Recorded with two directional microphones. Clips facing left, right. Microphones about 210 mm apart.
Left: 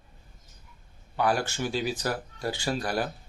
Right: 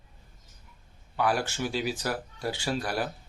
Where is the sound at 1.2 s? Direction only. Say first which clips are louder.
Left 1 dB; centre (ahead or behind).